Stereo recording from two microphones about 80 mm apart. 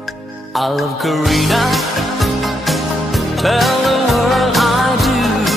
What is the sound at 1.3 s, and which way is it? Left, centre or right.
Music, centre.